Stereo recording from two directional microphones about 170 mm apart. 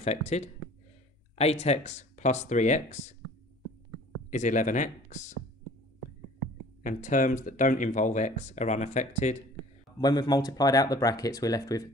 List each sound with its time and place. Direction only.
0.0 s speech: 40° left (ahead or behind)
4.3 s speech: 45° left (ahead or behind)
6.8 s speech: 50° left (ahead or behind)
9.9 s speech: 25° left (ahead or behind)